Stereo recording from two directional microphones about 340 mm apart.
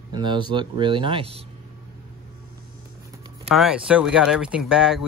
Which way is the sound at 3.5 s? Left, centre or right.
Centre.